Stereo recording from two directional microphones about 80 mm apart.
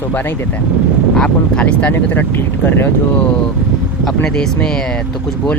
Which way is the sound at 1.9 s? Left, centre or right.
Left.